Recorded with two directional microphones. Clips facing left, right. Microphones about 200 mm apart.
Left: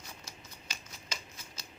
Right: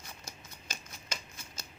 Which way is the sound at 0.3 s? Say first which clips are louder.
Right 2 dB; 50° right (ahead or behind).